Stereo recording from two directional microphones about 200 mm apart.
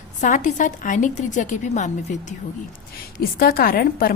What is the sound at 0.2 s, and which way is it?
A woman's voice, 40° left (ahead or behind).